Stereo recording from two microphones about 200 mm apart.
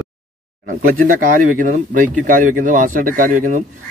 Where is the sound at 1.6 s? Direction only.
40° right (ahead or behind).